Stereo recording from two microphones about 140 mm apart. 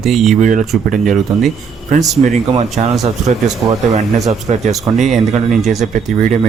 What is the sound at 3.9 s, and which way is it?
Speech, 50° right (ahead or behind).